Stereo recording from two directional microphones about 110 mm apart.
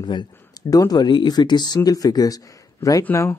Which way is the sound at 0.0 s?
40° left (ahead or behind).